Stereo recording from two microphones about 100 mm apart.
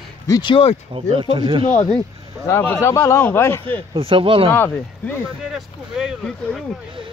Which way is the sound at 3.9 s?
65° right (ahead or behind).